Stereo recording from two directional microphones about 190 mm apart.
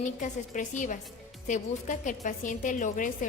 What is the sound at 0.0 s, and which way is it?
A woman's voice, 40° left (ahead or behind).